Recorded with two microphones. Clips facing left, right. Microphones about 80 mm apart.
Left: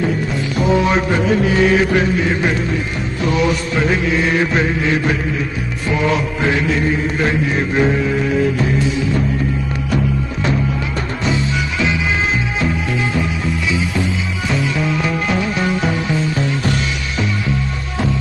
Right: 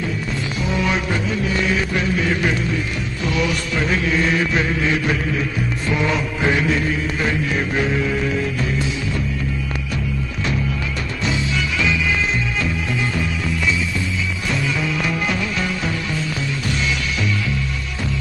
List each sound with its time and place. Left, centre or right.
1.2 s music: left
3.3 s mantra: left